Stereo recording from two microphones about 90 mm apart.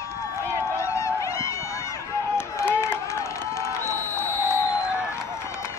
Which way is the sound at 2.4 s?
30° left (ahead or behind).